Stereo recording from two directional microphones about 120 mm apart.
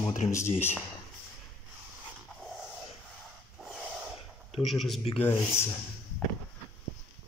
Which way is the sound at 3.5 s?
5° right (ahead or behind).